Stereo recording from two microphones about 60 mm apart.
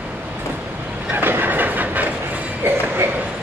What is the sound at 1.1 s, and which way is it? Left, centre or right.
Train, right.